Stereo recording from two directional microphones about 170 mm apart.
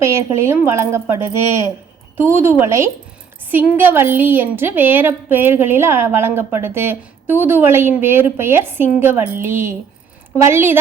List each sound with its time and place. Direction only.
0.0 s a woman's voice: 15° right (ahead or behind)